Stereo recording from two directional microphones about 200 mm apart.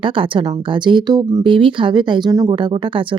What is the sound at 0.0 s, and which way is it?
Speech, 25° right (ahead or behind).